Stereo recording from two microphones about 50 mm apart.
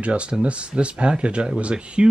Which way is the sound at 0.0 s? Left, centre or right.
Right.